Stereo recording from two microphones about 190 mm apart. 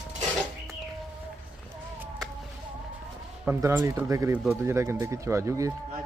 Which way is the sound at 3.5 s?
10° right (ahead or behind).